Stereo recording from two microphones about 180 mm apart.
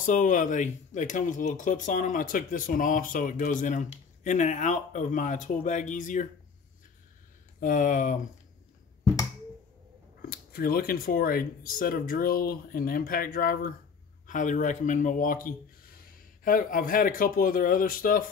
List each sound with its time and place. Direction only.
0.0 s speech: 45° left (ahead or behind)
7.6 s speech: 45° left (ahead or behind)
10.3 s speech: 55° left (ahead or behind)